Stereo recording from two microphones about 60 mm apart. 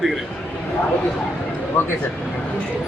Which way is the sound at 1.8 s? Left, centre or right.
Left.